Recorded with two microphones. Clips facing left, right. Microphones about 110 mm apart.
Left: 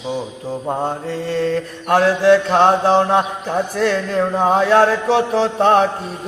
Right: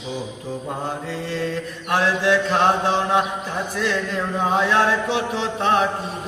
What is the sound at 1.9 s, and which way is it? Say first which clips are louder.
Mantra: left 7 dB; 40° left (ahead or behind).